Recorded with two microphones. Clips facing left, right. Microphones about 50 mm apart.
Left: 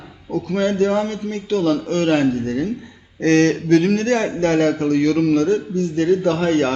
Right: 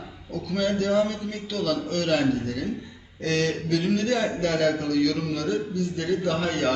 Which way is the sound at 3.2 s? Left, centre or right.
Left.